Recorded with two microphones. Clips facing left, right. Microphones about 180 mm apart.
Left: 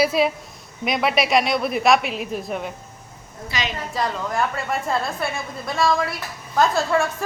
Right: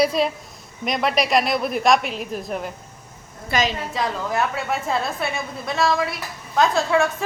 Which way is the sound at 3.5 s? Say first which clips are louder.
Right 6 dB; 55° right (ahead or behind).